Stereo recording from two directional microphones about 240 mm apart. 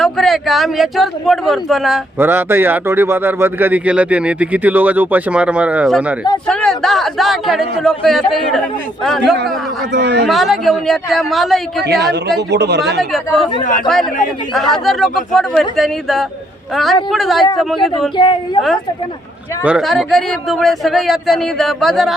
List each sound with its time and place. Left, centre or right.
0.0 s speech: centre
9.9 s speech: right
10.2 s speech: centre
12.4 s speech: right
13.1 s speech: centre
18.2 s a woman's voice: centre
19.6 s speech: centre